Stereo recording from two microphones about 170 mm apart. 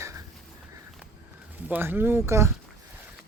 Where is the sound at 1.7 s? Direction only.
10° right (ahead or behind).